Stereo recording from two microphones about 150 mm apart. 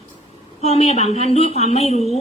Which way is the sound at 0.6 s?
45° left (ahead or behind).